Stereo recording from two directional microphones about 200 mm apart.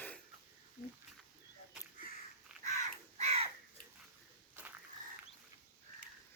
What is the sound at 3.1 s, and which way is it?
Crow, 30° right (ahead or behind).